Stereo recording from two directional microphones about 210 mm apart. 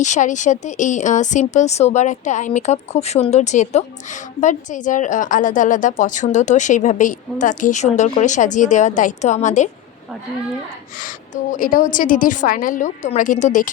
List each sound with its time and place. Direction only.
0.0 s speech: 35° left (ahead or behind)
11.5 s speech: 40° left (ahead or behind)